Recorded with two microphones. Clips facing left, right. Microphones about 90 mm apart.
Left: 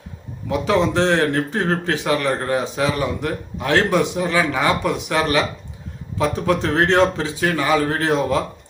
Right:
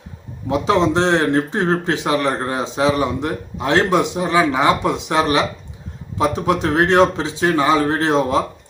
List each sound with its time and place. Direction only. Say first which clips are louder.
0.4 s speech: right 2 dB; 20° right (ahead or behind)